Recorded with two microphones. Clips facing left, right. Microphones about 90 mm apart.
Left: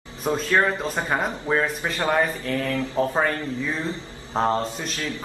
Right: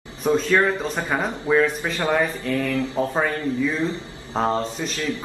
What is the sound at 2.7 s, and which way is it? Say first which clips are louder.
Speech: right 2 dB; 15° right (ahead or behind).